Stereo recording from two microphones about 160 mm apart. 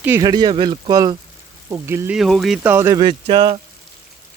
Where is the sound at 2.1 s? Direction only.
Centre (ahead or behind).